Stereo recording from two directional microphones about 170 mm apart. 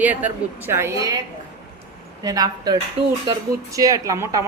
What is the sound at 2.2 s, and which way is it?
A woman's voice, 20° right (ahead or behind).